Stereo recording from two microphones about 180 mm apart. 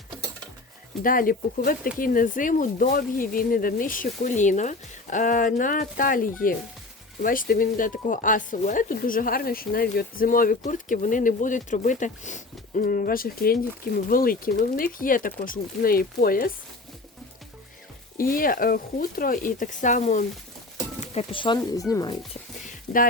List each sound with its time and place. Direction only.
1.0 s speech: 50° left (ahead or behind)
18.2 s speech: 50° left (ahead or behind); by 22.1 s 20° left (ahead or behind)